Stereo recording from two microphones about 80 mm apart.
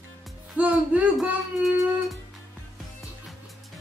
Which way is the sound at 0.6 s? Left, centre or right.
Centre.